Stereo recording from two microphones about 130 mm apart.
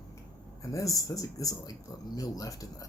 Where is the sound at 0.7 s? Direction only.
25° left (ahead or behind).